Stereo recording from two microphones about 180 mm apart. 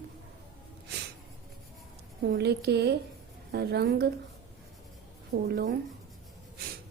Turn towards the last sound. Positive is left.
turn(degrees=-70)  # may be behind; listen again after turning